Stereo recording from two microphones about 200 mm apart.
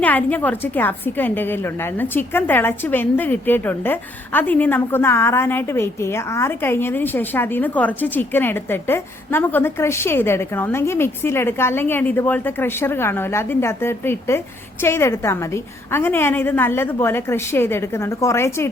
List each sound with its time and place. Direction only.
0.0 s a woman's voice: 10° left (ahead or behind)